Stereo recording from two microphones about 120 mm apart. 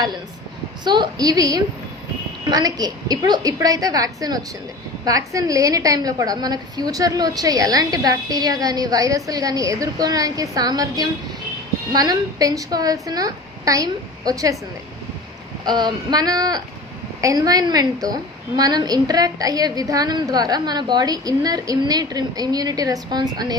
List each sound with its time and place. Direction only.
0.9 s a woman's voice: 40° right (ahead or behind)
15.6 s a woman's voice: 35° right (ahead or behind)